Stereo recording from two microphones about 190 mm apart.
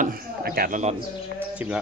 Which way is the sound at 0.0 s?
50° right (ahead or behind).